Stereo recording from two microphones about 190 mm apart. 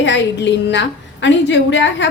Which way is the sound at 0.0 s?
70° left (ahead or behind).